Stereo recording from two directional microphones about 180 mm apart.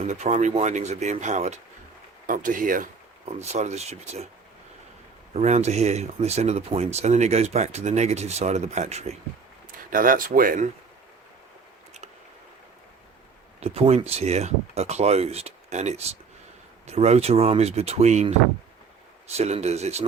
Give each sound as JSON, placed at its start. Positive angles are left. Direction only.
{"t": 0.1, "sound": "speech", "side_deg": -40}
{"t": 5.3, "sound": "speech", "side_deg": -40}
{"t": 9.9, "sound": "speech", "side_deg": -50}
{"t": 13.6, "sound": "speech", "side_deg": -35}
{"t": 19.4, "sound": "speech", "side_deg": -35}